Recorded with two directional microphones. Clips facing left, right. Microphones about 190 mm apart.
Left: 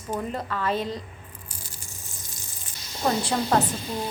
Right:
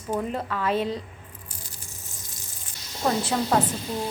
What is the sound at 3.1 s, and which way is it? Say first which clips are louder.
Speech: even; 5° right (ahead or behind).